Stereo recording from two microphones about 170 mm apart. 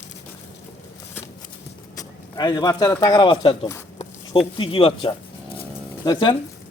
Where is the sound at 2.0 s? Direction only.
25° left (ahead or behind).